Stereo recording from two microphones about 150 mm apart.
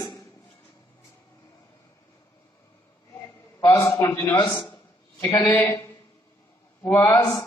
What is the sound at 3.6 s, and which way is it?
A man's voice, 20° left (ahead or behind).